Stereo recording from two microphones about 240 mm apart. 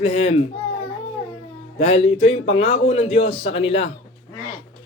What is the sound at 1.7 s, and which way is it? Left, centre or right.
A man's voice, left.